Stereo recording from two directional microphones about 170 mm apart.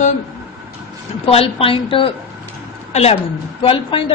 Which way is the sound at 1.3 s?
35° left (ahead or behind).